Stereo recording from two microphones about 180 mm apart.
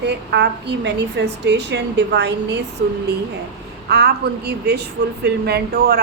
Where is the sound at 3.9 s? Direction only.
65° right (ahead or behind).